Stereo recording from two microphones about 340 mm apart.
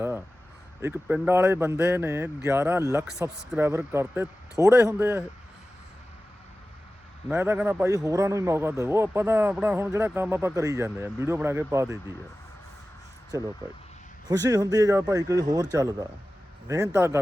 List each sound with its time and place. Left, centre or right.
0.8 s a man's voice: centre
7.3 s a man's voice: centre
13.3 s a man's voice: centre